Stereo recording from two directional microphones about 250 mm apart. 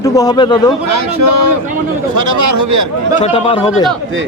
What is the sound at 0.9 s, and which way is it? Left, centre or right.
Speech, right.